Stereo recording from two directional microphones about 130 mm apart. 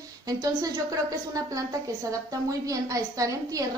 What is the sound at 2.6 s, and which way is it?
A woman's voice, 25° right (ahead or behind).